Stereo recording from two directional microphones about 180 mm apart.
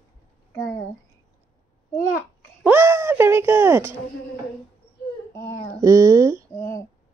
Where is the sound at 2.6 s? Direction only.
10° right (ahead or behind).